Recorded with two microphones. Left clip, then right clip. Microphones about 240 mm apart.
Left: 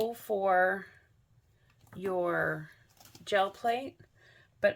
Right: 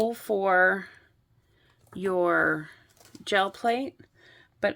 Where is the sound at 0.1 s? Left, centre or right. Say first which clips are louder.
Right 4 dB; right.